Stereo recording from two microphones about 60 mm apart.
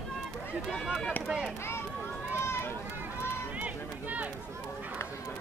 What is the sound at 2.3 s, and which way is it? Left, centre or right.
Run, left.